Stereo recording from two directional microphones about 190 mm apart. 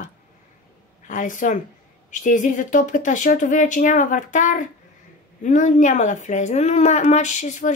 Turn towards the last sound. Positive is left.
turn(degrees=40)  # may be behind; listen again after turning